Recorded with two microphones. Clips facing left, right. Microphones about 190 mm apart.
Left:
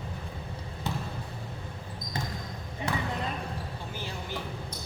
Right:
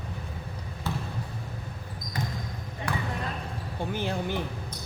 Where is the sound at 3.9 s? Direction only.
55° right (ahead or behind).